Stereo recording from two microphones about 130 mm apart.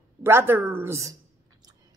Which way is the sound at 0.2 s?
20° right (ahead or behind).